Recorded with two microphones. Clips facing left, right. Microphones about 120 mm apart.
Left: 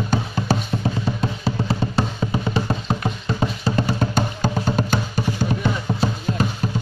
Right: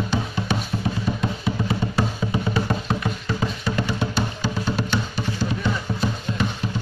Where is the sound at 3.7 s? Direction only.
40° left (ahead or behind).